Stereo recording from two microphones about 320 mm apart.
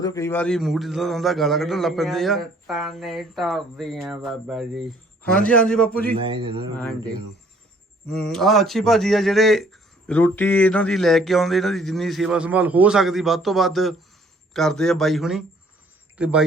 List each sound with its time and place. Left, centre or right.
0.0 s a man's voice: centre
6.1 s a man's voice: centre
8.1 s a man's voice: centre